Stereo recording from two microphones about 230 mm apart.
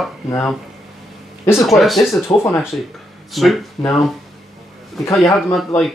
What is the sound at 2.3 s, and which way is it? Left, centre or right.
Speech, centre.